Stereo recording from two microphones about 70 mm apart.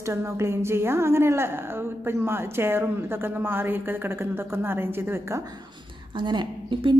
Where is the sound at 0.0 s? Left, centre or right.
Right.